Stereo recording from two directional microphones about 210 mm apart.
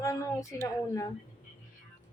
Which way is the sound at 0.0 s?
15° left (ahead or behind).